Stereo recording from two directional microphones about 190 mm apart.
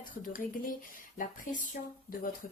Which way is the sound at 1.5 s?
45° left (ahead or behind).